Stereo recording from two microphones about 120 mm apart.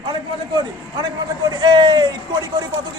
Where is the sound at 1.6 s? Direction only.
35° right (ahead or behind).